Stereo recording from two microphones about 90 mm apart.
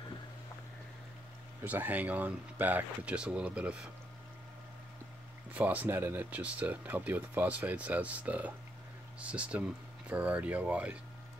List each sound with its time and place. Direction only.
1.6 s speech: 20° right (ahead or behind)
5.5 s speech: 15° right (ahead or behind)